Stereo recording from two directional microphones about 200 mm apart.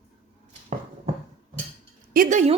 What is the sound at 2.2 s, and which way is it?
Speech, 35° right (ahead or behind).